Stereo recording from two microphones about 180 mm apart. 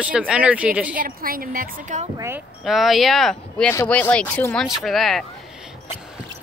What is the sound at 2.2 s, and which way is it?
Speech, 15° right (ahead or behind).